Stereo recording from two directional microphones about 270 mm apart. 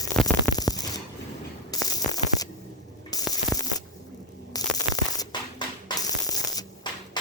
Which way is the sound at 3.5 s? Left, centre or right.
Centre.